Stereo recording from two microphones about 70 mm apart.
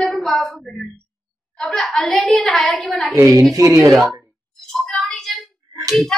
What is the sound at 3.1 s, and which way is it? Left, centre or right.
Speech, right.